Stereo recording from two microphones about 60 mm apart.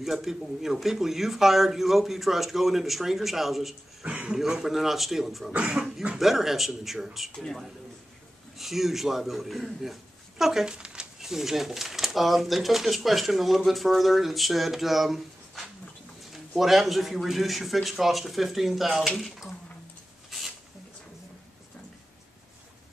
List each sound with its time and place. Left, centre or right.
0.0 s a man's voice: centre
4.0 s a man's voice: centre
6.1 s a man's voice: centre
20.2 s a sound: centre